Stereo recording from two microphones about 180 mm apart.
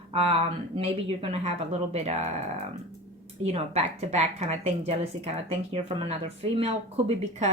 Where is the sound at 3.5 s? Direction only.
35° right (ahead or behind).